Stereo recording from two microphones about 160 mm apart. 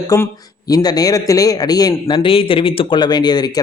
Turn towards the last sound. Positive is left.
turn(degrees=25)  # may be behind; listen again after turning